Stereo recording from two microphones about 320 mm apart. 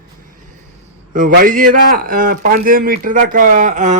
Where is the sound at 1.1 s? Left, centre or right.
Right.